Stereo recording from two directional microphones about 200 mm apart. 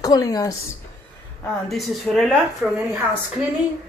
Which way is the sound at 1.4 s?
Centre (ahead or behind).